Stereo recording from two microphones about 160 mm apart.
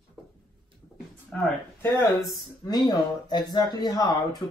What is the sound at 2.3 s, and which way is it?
Speech, 25° left (ahead or behind).